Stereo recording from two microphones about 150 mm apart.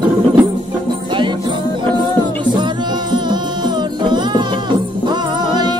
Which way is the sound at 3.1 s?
30° right (ahead or behind).